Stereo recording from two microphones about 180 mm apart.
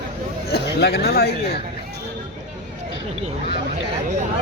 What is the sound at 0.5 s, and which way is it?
Speech, 65° left (ahead or behind).